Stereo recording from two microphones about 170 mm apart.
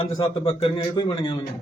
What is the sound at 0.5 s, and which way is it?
Speech, 30° left (ahead or behind).